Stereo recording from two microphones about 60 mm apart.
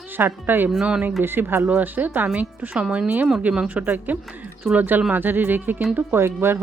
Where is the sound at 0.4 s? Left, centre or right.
Right.